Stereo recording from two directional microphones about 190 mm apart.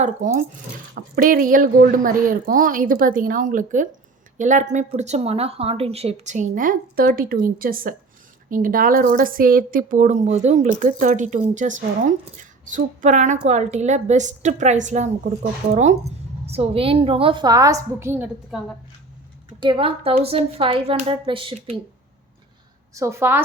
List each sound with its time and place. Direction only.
0.0 s a woman's voice: 40° right (ahead or behind); by 18.6 s 10° right (ahead or behind)
19.5 s a woman's voice: 25° right (ahead or behind)
23.0 s a woman's voice: 15° right (ahead or behind)